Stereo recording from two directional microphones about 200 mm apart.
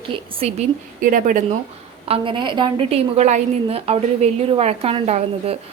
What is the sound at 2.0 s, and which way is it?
Speech, 25° right (ahead or behind).